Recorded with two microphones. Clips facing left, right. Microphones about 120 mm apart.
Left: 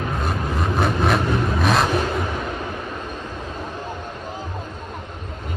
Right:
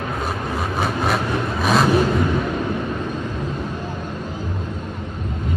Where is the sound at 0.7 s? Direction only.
Centre (ahead or behind).